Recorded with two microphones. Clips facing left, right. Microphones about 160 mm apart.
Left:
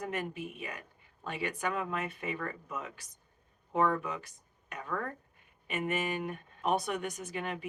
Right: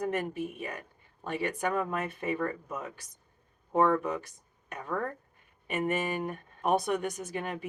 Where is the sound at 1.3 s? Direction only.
45° right (ahead or behind).